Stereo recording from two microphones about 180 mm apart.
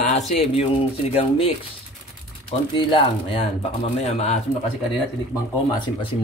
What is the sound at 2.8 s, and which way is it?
Speech, 30° left (ahead or behind).